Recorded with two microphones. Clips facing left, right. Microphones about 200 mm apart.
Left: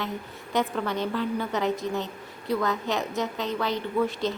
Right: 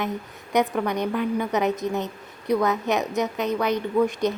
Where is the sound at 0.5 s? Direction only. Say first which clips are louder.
Right 4 dB; 15° right (ahead or behind).